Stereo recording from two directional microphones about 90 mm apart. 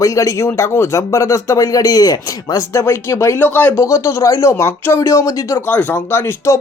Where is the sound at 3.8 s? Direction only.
35° left (ahead or behind).